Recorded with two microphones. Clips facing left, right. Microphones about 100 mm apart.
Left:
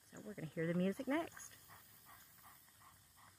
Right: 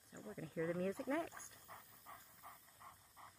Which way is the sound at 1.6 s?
70° right (ahead or behind).